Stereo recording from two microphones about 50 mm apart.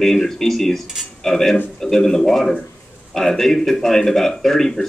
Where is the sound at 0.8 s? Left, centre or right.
Centre.